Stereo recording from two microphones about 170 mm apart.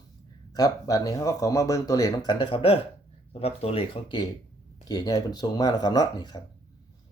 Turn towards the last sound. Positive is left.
turn(degrees=25)  # may be behind; listen again after turning